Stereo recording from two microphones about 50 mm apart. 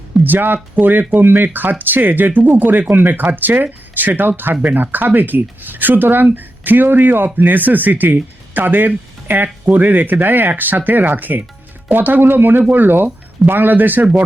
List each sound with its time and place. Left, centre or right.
0.3 s speech: right